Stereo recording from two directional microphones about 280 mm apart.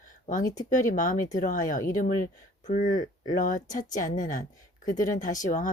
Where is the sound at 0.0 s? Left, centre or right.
Left.